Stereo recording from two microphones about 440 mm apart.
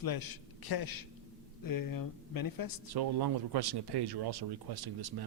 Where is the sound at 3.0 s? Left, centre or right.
Right.